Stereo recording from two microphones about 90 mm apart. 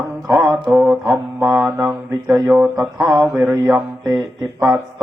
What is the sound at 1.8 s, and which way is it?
Speech, 25° right (ahead or behind).